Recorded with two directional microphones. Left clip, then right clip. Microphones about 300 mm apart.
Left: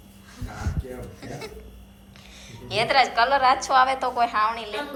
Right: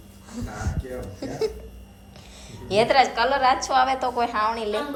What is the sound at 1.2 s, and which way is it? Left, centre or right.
A woman's voice, centre.